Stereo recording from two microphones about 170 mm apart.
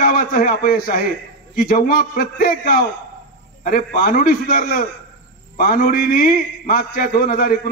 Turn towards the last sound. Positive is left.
turn(degrees=60)  # may be behind; listen again after turning